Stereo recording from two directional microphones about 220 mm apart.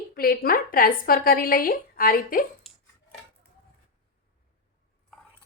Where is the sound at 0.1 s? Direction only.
40° left (ahead or behind).